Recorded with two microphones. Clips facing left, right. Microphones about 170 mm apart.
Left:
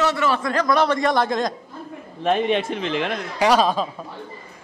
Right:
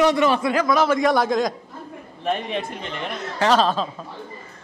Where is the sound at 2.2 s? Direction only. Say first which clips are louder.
Left 5 dB; 90° left.